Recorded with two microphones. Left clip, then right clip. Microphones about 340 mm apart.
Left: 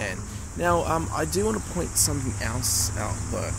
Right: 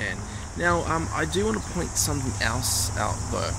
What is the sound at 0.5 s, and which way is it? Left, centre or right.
Speech, centre.